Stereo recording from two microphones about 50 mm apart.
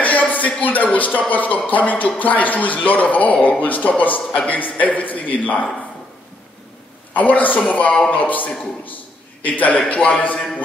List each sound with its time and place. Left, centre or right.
0.0 s a sound: left
0.9 s a man's voice: left
7.2 s a man's voice: left